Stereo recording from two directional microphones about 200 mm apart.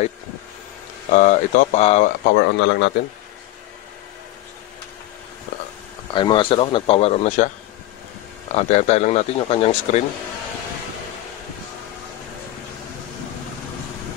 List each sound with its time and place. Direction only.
1.1 s speech: 40° left (ahead or behind)
2.2 s speech: 60° left (ahead or behind)
6.1 s speech: 25° left (ahead or behind)
8.5 s speech: 35° left (ahead or behind)